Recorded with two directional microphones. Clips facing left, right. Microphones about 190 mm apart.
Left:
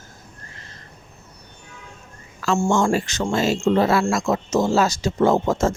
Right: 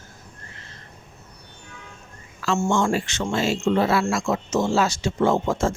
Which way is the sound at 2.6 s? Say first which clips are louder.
Left 2 dB; 40° left (ahead or behind).